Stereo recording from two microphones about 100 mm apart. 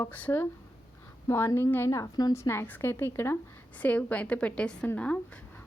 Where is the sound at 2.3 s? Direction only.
25° left (ahead or behind).